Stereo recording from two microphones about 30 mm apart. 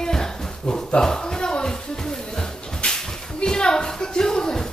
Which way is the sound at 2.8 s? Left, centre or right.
Left.